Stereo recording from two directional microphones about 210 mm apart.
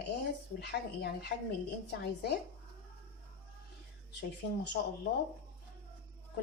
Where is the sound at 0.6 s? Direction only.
50° left (ahead or behind).